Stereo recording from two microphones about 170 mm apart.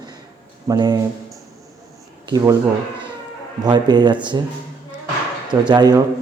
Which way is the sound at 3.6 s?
25° right (ahead or behind).